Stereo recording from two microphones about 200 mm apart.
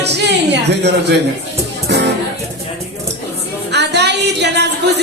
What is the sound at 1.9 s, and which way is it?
Music, 60° right (ahead or behind).